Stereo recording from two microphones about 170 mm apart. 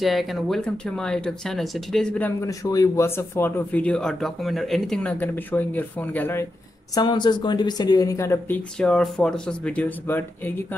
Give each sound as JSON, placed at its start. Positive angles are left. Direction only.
{"t": 0.0, "sound": "speech", "side_deg": 0}
{"t": 2.4, "sound": "speech", "side_deg": 20}
{"t": 7.0, "sound": "speech", "side_deg": 25}
{"t": 8.7, "sound": "speech", "side_deg": 5}